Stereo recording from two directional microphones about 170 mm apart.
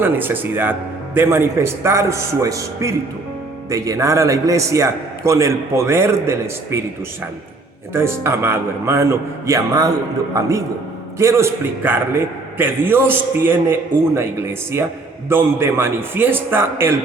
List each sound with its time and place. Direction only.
0.0 s a man's voice: 10° right (ahead or behind)
7.9 s a man's voice: 15° right (ahead or behind)
11.2 s a man's voice: 15° right (ahead or behind)